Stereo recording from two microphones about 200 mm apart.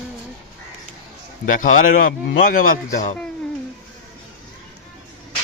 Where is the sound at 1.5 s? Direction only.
40° left (ahead or behind).